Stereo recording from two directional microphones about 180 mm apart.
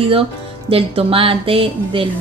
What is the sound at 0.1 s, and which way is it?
A woman's voice, 30° right (ahead or behind).